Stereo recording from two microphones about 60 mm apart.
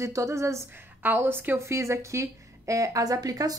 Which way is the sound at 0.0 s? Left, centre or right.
Right.